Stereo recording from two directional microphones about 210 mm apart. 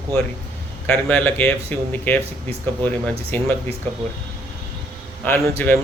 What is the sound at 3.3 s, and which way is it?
Speech, 10° left (ahead or behind).